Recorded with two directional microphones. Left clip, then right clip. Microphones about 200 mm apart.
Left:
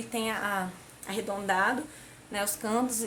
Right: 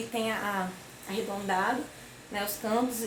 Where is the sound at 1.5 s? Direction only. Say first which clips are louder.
Left 2 dB; 25° left (ahead or behind).